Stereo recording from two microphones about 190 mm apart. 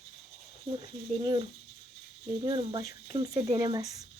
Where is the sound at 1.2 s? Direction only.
25° right (ahead or behind).